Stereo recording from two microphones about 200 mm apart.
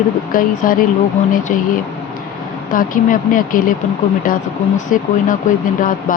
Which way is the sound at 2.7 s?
45° left (ahead or behind).